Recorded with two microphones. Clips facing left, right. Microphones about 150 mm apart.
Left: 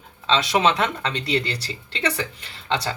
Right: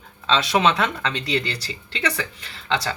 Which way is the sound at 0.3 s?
20° left (ahead or behind).